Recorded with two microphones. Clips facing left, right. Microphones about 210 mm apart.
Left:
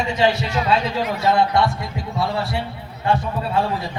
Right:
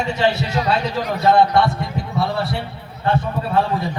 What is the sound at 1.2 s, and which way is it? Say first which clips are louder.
A man's voice: right 4 dB; 60° right (ahead or behind).